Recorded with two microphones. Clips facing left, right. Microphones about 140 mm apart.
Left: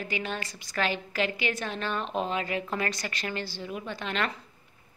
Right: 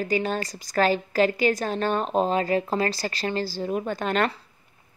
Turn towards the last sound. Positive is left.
turn(degrees=-45)  # may be behind; listen again after turning